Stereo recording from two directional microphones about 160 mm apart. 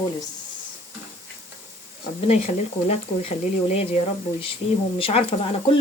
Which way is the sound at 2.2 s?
40° left (ahead or behind).